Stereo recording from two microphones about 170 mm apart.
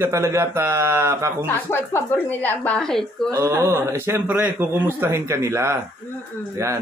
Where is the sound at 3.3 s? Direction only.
15° right (ahead or behind).